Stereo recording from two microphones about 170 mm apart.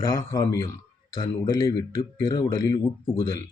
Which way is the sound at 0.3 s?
20° left (ahead or behind).